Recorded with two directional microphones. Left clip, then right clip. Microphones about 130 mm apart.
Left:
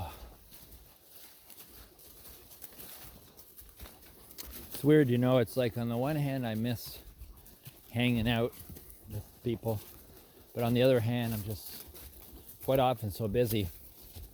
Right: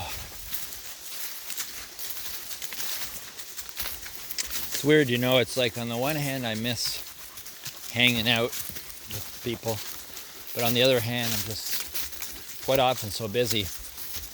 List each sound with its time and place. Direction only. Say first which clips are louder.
4.4 s a sound: right 16 dB; 25° left (ahead or behind)
4.8 s speech: right 4 dB; 25° left (ahead or behind)
9.5 s speech: right 3 dB; 35° left (ahead or behind)
10.8 s speech: right 4 dB; 45° left (ahead or behind)
12.6 s speech: right 5 dB; 35° left (ahead or behind)
13.1 s speech: right 4 dB; 45° left (ahead or behind)